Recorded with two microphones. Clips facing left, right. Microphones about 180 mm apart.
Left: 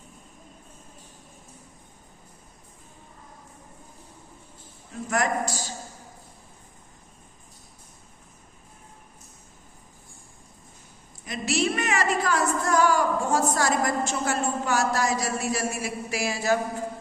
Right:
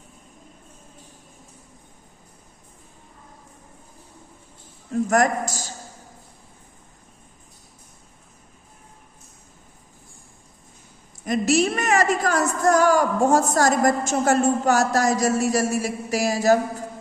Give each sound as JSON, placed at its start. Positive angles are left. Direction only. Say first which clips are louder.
{"t": 5.0, "sound": "speech", "louder": "right 4 dB", "side_deg": -45}
{"t": 11.3, "sound": "speech", "louder": "right 6 dB", "side_deg": -45}